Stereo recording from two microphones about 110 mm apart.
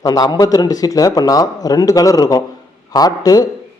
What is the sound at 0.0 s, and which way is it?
Speech, 35° left (ahead or behind).